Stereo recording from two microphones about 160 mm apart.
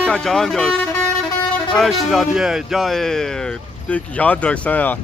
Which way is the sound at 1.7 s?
Centre (ahead or behind).